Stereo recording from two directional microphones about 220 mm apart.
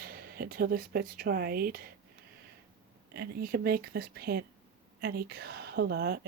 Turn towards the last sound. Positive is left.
turn(degrees=-45)  # may be behind; listen again after turning